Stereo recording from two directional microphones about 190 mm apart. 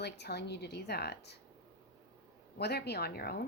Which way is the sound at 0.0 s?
60° left (ahead or behind).